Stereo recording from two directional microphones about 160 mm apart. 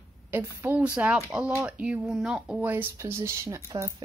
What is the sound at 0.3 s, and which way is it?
A woman's voice, 15° right (ahead or behind).